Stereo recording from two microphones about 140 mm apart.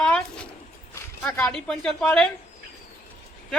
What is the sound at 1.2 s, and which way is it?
Speech, 10° left (ahead or behind).